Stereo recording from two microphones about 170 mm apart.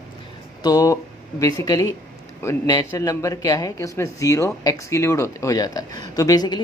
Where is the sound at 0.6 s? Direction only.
20° left (ahead or behind).